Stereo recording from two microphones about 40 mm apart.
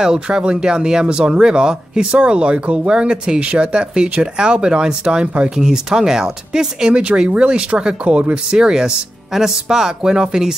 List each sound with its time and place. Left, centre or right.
0.0 s speech: centre
6.9 s speech: right
8.5 s speech: centre